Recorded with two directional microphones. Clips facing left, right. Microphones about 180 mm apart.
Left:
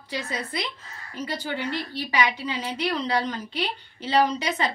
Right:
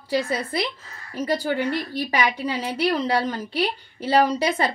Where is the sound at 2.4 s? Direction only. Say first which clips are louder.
Right 5 dB; 35° right (ahead or behind).